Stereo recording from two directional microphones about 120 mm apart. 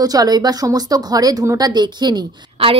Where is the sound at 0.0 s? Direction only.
30° right (ahead or behind).